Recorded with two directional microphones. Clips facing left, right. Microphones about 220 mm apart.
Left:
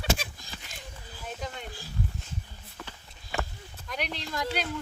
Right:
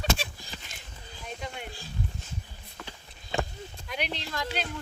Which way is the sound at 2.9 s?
15° right (ahead or behind).